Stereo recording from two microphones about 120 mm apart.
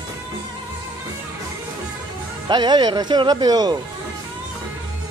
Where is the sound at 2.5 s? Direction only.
35° right (ahead or behind).